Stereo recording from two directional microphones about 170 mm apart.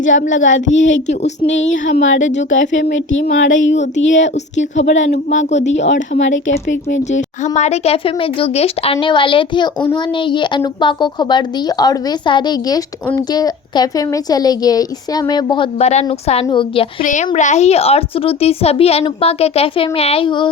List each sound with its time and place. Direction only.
0.0 s speech: 90° left
5.0 s speech: 45° left (ahead or behind)
5.9 s speech: 90° left
7.1 s a woman's voice: 45° left (ahead or behind)
17.0 s speech: 45° left (ahead or behind); by 20.5 s 30° left (ahead or behind)